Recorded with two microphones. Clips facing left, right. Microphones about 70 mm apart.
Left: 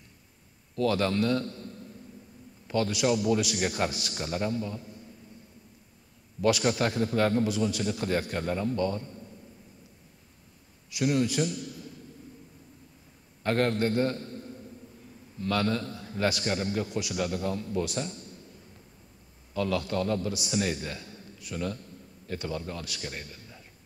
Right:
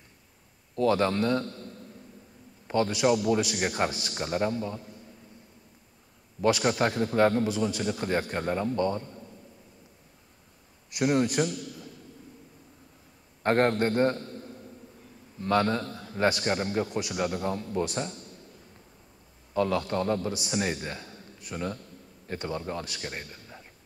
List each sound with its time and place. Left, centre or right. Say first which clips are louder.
0.7 s a man's voice: right 2 dB; right
2.7 s a man's voice: right 2 dB; right
3.3 s a man's voice: right 1 dB; right
3.6 s a man's voice: right 1 dB; right
6.4 s a man's voice: right 1 dB; right
10.9 s a man's voice: right 2 dB; right
13.4 s a man's voice: right 3 dB; right
15.4 s a man's voice: right 3 dB; right
16.8 s a man's voice: right 1 dB; right
19.5 s a man's voice: right 2 dB; right